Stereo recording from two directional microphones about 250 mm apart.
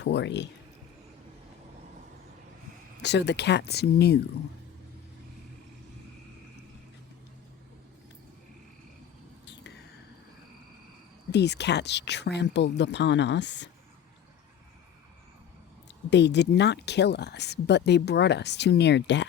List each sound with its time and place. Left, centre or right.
0.0 s speech: left
3.0 s speech: left
11.3 s speech: left
15.9 s speech: left